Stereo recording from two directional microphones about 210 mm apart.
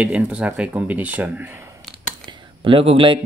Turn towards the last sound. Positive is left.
turn(degrees=-25)  # may be behind; listen again after turning